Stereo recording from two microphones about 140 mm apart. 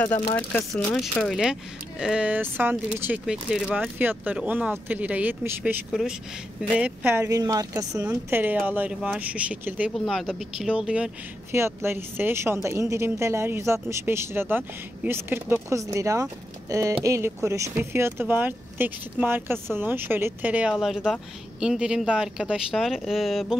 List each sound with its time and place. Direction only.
0.6 s speech: centre (ahead or behind)
5.9 s speech: centre (ahead or behind)
6.8 s speech: 15° right (ahead or behind)
7.2 s speech: 25° right (ahead or behind)
8.0 s speech: 15° right (ahead or behind)
9.9 s speech: centre (ahead or behind)